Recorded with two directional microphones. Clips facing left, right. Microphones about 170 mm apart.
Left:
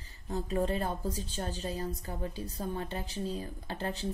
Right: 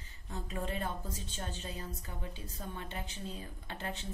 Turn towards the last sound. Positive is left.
turn(degrees=35)  # may be behind; listen again after turning